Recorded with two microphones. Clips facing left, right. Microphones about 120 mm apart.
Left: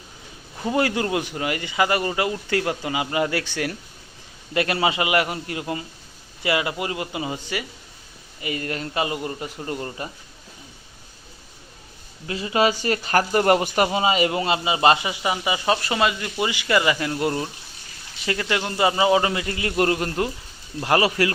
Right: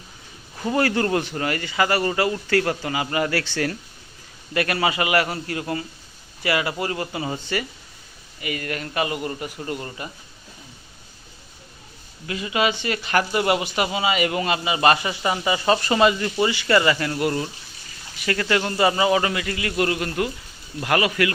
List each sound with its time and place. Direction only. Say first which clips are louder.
0.7 s speech: right 1 dB; 15° left (ahead or behind)
4.5 s a man's voice: even; 25° left (ahead or behind)
8.4 s a man's voice: left 1 dB; 30° left (ahead or behind)
12.3 s speech: left 2 dB; 30° left (ahead or behind)
15.0 s speech: right 1 dB; 10° left (ahead or behind)
16.4 s a man's voice: right 2 dB; 15° left (ahead or behind); by 21.3 s 30° left (ahead or behind)